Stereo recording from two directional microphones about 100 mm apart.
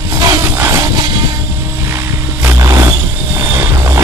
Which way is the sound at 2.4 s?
30° right (ahead or behind).